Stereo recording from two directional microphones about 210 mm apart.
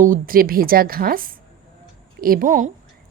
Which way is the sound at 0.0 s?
40° right (ahead or behind).